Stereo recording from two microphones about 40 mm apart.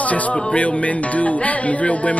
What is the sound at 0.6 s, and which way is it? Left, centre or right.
Music, left.